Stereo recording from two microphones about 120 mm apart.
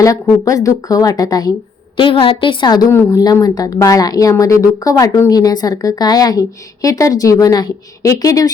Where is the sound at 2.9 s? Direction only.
25° left (ahead or behind).